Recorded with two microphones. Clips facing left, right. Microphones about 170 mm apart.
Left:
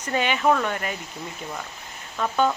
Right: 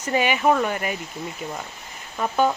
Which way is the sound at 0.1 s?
10° right (ahead or behind).